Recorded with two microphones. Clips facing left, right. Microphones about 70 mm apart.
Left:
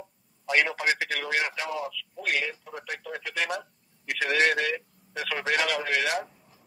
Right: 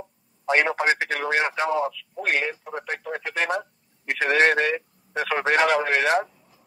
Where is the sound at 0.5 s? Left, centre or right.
Right.